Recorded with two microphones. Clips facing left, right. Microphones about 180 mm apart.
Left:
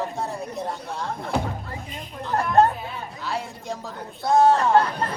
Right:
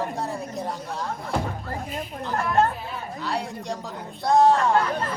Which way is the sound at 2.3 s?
35° left (ahead or behind).